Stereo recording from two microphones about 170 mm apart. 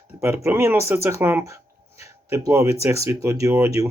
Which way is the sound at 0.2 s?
15° right (ahead or behind).